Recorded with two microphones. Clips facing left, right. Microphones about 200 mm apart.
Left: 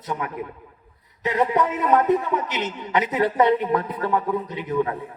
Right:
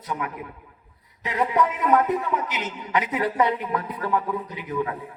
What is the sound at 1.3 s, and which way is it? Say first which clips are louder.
Speech: left 2 dB; 40° left (ahead or behind).